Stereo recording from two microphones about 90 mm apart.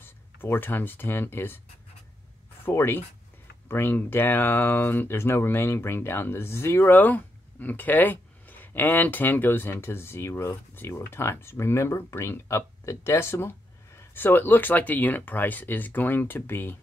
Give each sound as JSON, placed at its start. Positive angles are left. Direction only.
{"t": 0.0, "sound": "speech", "side_deg": 25}
{"t": 2.6, "sound": "speech", "side_deg": 25}